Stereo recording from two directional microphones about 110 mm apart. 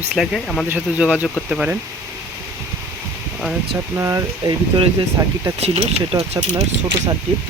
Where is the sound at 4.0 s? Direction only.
30° right (ahead or behind).